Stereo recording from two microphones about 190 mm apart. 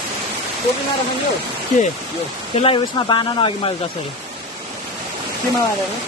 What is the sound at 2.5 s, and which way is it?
Speech, 30° left (ahead or behind).